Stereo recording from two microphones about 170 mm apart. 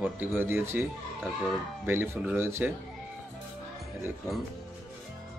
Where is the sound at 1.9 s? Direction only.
15° right (ahead or behind).